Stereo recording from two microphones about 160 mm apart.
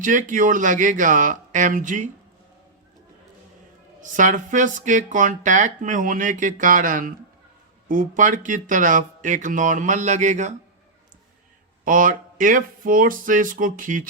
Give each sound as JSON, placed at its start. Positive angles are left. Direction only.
{"t": 0.0, "sound": "speech", "side_deg": -55}
{"t": 4.0, "sound": "speech", "side_deg": -50}
{"t": 11.9, "sound": "speech", "side_deg": -55}